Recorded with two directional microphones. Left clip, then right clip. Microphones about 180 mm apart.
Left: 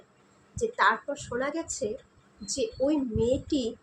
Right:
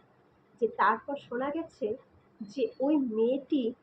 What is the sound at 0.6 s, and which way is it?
Speech, 35° left (ahead or behind).